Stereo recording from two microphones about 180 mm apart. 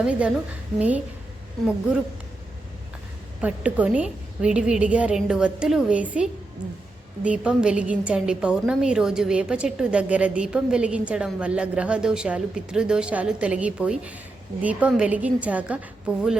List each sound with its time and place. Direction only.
0.0 s a woman's voice: 5° right (ahead or behind)
3.4 s a woman's voice: 5° right (ahead or behind)